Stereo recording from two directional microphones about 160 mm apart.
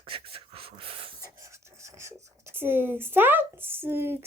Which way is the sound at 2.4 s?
15° right (ahead or behind).